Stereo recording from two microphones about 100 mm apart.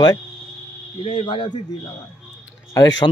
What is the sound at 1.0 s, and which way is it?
Speech, 70° left (ahead or behind).